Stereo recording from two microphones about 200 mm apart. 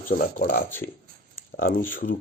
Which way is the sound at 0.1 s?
45° left (ahead or behind).